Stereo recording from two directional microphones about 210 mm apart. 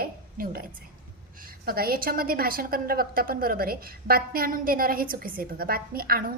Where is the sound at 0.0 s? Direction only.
45° right (ahead or behind).